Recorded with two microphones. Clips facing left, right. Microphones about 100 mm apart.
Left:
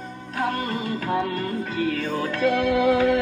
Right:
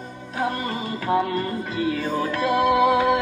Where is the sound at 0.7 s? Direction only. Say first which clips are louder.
Right 2 dB; 5° right (ahead or behind).